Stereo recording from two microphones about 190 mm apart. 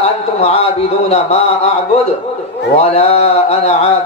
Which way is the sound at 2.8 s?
30° left (ahead or behind).